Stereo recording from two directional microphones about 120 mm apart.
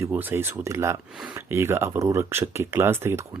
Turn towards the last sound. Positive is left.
turn(degrees=-20)  # may be behind; listen again after turning